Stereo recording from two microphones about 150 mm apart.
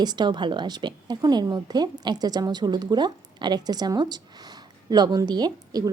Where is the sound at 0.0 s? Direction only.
30° right (ahead or behind).